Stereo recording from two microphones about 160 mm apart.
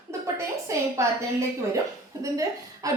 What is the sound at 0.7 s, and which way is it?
Speech, 20° right (ahead or behind).